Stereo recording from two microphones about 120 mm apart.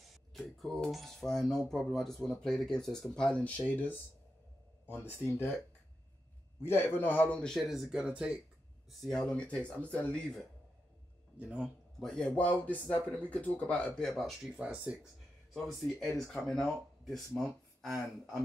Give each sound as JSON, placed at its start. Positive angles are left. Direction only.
{"t": 0.3, "sound": "speech", "side_deg": 0}
{"t": 6.6, "sound": "speech", "side_deg": 15}
{"t": 9.0, "sound": "speech", "side_deg": 5}
{"t": 11.3, "sound": "speech", "side_deg": -10}
{"t": 12.0, "sound": "speech", "side_deg": 5}
{"t": 14.6, "sound": "speech", "side_deg": -10}
{"t": 15.5, "sound": "speech", "side_deg": 0}